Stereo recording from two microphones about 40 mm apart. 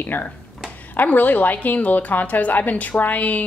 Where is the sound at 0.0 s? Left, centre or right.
Left.